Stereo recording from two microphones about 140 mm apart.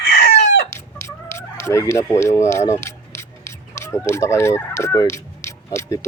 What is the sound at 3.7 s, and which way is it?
Fowl, 20° left (ahead or behind).